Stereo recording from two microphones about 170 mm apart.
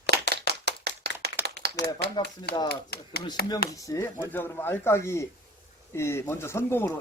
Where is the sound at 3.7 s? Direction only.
20° left (ahead or behind).